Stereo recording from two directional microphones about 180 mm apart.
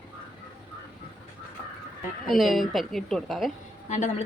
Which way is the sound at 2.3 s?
Centre (ahead or behind).